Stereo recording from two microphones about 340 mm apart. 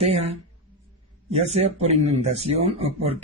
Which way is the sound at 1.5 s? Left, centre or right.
Centre.